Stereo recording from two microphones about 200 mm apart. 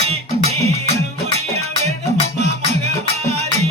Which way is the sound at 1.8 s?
35° right (ahead or behind).